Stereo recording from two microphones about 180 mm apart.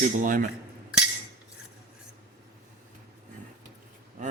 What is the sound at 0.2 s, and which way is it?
Speech, 50° right (ahead or behind).